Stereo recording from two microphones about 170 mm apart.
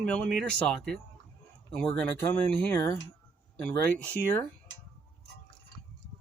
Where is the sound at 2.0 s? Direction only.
10° left (ahead or behind).